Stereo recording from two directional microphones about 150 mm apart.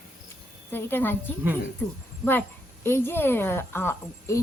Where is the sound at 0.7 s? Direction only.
15° left (ahead or behind).